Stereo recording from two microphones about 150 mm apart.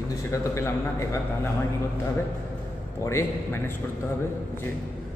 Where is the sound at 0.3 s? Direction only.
20° left (ahead or behind).